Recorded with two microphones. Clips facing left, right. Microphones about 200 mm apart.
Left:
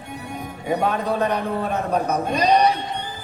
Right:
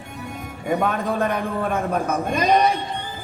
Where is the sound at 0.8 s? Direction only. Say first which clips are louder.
Left 2 dB; 50° right (ahead or behind).